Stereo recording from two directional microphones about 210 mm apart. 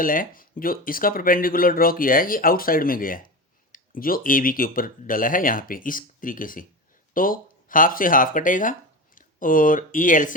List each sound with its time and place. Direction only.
0.0 s speech: 40° left (ahead or behind)